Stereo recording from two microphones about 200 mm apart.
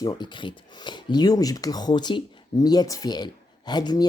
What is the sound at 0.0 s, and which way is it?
Speech, 25° left (ahead or behind).